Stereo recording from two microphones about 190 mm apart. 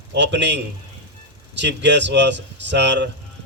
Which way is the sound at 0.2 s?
70° right (ahead or behind).